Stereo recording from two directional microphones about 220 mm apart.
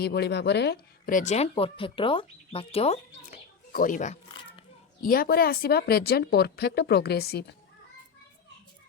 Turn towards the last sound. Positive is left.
turn(degrees=45)  # may be behind; listen again after turning